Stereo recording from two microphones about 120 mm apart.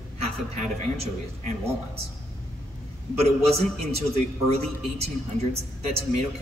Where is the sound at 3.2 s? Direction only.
60° right (ahead or behind).